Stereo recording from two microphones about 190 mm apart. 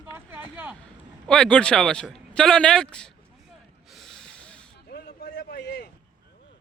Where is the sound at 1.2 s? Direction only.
5° left (ahead or behind).